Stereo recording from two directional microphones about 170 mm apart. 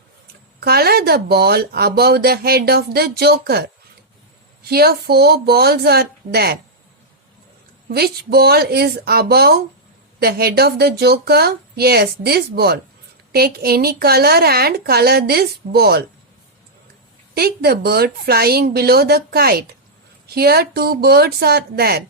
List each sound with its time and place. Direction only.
0.6 s speech: 65° right (ahead or behind)
4.7 s speech: 65° right (ahead or behind)
7.9 s speech: 65° right (ahead or behind)
17.3 s a woman's voice: 65° right (ahead or behind)